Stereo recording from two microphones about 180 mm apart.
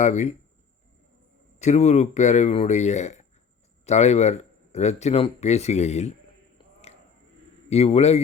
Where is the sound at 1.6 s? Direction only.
40° left (ahead or behind).